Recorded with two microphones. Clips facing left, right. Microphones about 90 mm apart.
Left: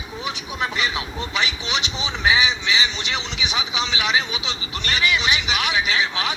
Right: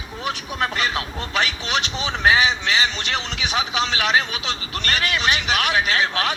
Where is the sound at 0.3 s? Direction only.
50° right (ahead or behind).